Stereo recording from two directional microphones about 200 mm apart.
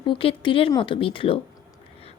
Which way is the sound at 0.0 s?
25° left (ahead or behind).